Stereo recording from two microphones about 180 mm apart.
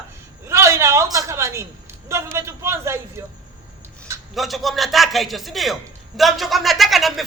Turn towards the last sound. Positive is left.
turn(degrees=0)  # may be behind; listen again after turning